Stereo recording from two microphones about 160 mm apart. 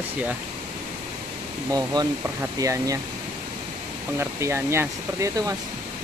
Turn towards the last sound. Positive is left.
turn(degrees=-20)  # may be behind; listen again after turning